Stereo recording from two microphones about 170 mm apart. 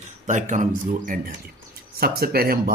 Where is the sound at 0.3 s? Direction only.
45° right (ahead or behind).